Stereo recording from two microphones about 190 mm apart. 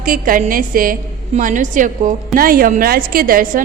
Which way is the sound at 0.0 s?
50° right (ahead or behind).